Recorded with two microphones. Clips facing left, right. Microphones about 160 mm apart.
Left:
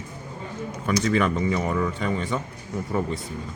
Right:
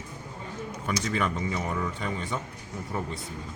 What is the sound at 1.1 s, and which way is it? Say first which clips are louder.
A man's voice: left 7 dB; 85° left.